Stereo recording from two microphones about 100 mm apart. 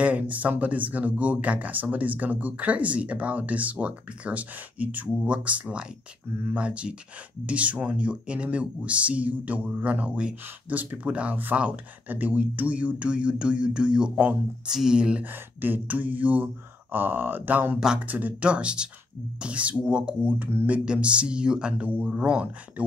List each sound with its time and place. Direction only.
0.0 s speech: 15° right (ahead or behind)